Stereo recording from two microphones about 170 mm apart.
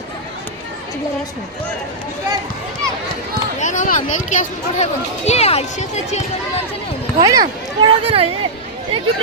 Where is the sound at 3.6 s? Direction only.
45° left (ahead or behind).